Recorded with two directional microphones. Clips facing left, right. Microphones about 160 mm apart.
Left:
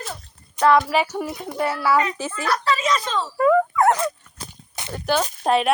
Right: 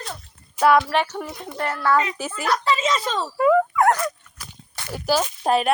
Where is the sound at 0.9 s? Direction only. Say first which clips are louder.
Left 1 dB; 10° left (ahead or behind).